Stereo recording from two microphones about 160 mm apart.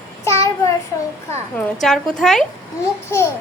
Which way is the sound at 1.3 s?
10° left (ahead or behind).